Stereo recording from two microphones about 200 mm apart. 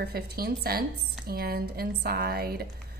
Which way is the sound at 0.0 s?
50° right (ahead or behind).